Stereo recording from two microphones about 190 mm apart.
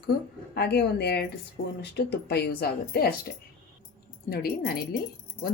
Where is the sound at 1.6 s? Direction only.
80° left.